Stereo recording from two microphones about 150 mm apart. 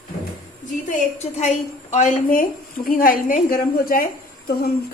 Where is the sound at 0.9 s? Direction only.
50° left (ahead or behind).